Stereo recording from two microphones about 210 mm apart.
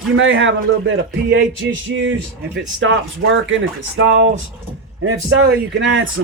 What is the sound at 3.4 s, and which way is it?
Speech, 65° right (ahead or behind).